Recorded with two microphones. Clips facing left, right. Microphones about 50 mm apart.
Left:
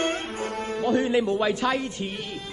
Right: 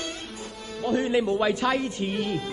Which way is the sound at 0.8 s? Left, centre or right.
Left.